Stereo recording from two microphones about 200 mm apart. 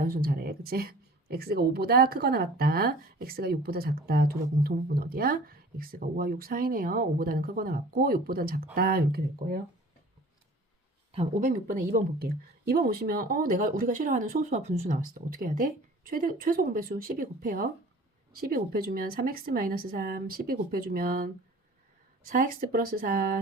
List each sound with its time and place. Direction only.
0.0 s speech: 45° right (ahead or behind)
11.1 s speech: 35° right (ahead or behind)
22.3 s speech: 45° right (ahead or behind)